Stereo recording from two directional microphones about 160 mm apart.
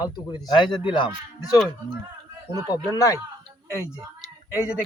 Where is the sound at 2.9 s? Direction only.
20° left (ahead or behind).